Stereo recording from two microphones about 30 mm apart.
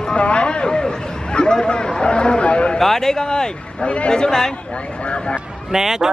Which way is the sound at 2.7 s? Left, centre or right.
Centre.